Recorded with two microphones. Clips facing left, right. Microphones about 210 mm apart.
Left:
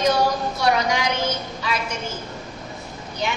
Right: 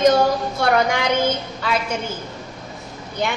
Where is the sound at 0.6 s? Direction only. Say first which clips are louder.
Right 2 dB; 55° right (ahead or behind).